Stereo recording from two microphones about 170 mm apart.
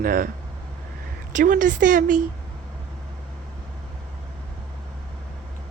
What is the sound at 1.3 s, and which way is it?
Speech, 50° right (ahead or behind).